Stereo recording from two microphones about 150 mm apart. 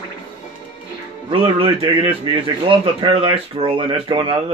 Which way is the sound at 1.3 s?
35° right (ahead or behind).